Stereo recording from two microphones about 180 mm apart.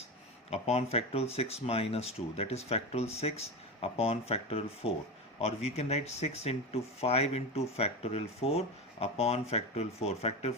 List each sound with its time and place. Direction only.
0.5 s speech: 35° left (ahead or behind)